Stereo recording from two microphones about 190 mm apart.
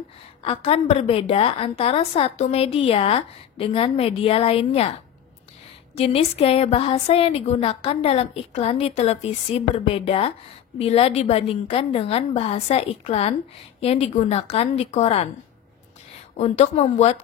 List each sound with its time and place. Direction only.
0.4 s a woman's voice: 30° left (ahead or behind)
5.9 s a woman's voice: 30° left (ahead or behind)
16.3 s a woman's voice: 35° left (ahead or behind)